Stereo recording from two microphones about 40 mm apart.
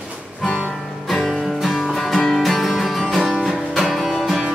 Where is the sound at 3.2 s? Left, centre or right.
Centre.